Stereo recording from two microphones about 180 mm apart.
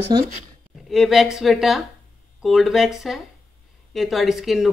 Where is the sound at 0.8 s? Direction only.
Centre (ahead or behind).